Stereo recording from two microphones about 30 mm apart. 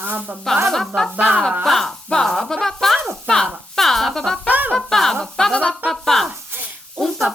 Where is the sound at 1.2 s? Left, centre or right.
Right.